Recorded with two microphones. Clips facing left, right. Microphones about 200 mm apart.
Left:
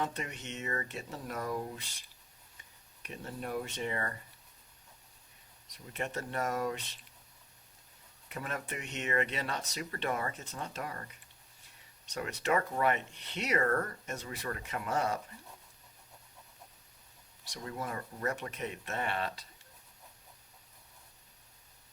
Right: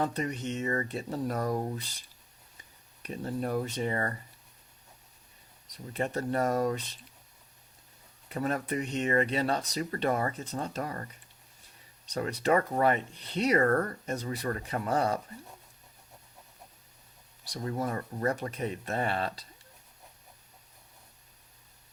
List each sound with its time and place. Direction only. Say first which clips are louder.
0.0 s speech: right 6 dB; 35° right (ahead or behind)
5.7 s speech: right 6 dB; 35° right (ahead or behind)
8.3 s speech: right 9 dB; 35° right (ahead or behind)
17.4 s speech: right 7 dB; 35° right (ahead or behind)